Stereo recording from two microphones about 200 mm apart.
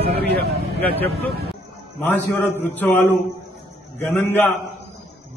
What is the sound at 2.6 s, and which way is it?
A man's voice, 10° left (ahead or behind).